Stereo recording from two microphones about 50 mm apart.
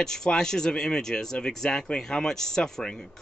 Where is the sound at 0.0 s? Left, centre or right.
Centre.